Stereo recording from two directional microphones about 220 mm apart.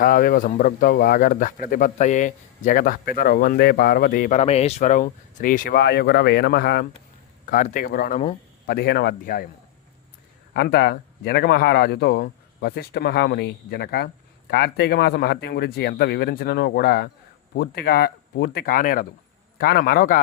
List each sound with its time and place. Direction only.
0.0 s speech: 40° left (ahead or behind)
7.5 s speech: 35° left (ahead or behind)
10.5 s a man's voice: 50° left (ahead or behind)